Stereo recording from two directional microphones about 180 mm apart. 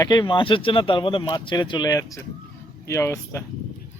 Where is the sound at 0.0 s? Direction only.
25° left (ahead or behind).